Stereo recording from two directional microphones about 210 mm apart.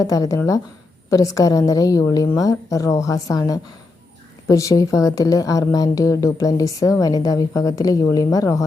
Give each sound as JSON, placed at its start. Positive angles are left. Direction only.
{"t": 0.0, "sound": "a woman's voice", "side_deg": 15}